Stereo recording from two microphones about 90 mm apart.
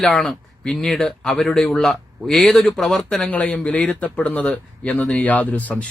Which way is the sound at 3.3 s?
15° left (ahead or behind).